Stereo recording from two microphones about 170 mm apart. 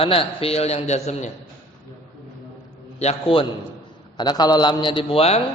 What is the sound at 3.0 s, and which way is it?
Speech, 35° left (ahead or behind).